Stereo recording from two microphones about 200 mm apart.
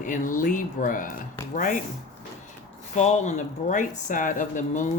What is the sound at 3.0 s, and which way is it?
Speech, 35° left (ahead or behind).